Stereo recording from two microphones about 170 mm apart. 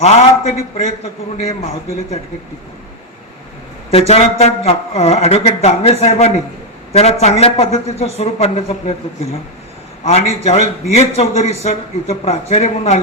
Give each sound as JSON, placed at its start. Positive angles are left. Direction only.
{"t": 0.0, "sound": "a man's voice", "side_deg": 40}
{"t": 3.9, "sound": "a man's voice", "side_deg": 40}
{"t": 10.0, "sound": "a man's voice", "side_deg": 40}